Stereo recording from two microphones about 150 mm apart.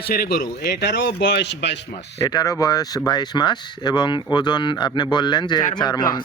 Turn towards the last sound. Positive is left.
turn(degrees=30)  # may be behind; listen again after turning